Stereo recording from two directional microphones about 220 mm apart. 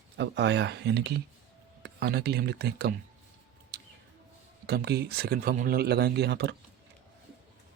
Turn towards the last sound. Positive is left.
turn(degrees=-50)  # may be behind; listen again after turning